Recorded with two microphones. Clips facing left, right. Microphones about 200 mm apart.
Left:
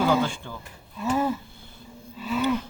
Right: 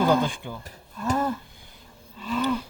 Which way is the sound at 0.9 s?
10° left (ahead or behind).